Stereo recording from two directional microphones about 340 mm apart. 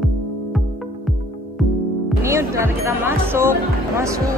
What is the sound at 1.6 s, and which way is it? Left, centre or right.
Music, centre.